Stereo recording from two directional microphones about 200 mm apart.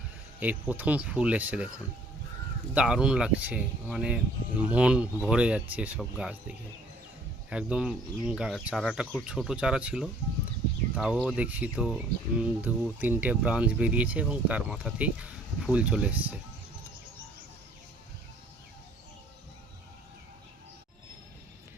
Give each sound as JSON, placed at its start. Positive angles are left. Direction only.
{"t": 0.3, "sound": "speech", "side_deg": -10}
{"t": 2.7, "sound": "speech", "side_deg": -5}